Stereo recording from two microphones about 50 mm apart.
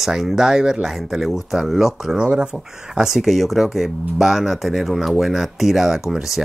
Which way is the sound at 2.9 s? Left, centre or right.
Centre.